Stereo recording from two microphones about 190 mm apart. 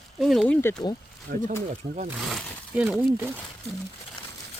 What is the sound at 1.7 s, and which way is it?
Speech, 40° right (ahead or behind).